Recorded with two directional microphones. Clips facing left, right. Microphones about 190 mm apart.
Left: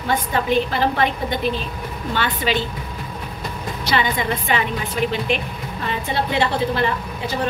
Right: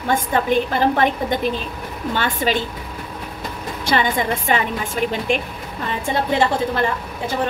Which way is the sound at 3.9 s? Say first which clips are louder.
Right 2 dB; 50° right (ahead or behind).